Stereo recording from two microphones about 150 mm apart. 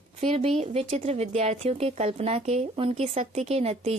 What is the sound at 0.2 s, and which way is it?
A woman's voice, 40° right (ahead or behind).